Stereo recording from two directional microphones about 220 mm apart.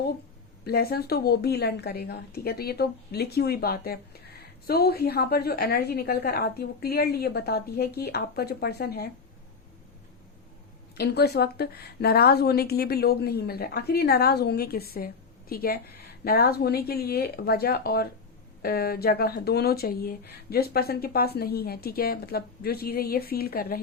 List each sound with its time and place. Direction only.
0.6 s speech: 45° left (ahead or behind)
10.9 s speech: 45° left (ahead or behind)